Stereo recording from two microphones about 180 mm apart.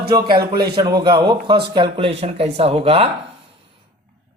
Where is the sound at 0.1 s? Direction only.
25° right (ahead or behind).